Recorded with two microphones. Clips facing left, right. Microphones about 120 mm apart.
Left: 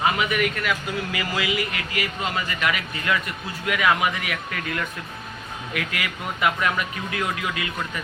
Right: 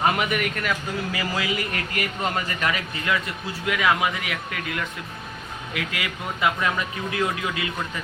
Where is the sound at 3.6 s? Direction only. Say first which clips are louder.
Left 1 dB; 20° right (ahead or behind).